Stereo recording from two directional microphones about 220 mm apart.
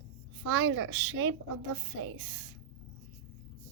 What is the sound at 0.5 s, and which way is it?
Speech, 70° right (ahead or behind).